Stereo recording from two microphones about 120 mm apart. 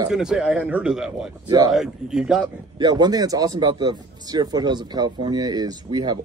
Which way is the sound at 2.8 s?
35° right (ahead or behind).